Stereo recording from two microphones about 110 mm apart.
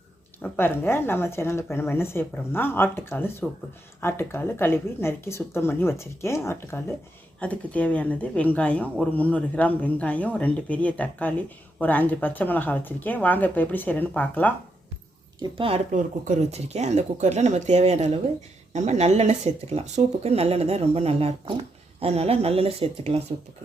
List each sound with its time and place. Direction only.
0.4 s speech: 20° left (ahead or behind)
15.4 s speech: 55° right (ahead or behind)
16.5 s speech: 75° right (ahead or behind)